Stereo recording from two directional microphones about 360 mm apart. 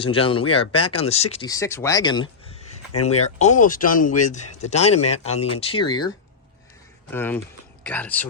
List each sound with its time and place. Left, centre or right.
0.0 s speech: centre
7.1 s speech: centre